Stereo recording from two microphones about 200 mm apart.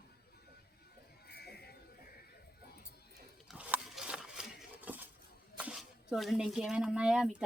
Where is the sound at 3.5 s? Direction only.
5° right (ahead or behind).